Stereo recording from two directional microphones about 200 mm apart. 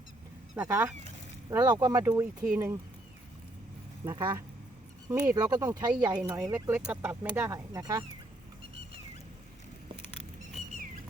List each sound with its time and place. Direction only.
0.5 s speech: 10° right (ahead or behind)
1.5 s speech: 20° right (ahead or behind)
2.0 s speech: 5° right (ahead or behind)
4.0 s speech: 20° right (ahead or behind)
6.4 s speech: 10° right (ahead or behind)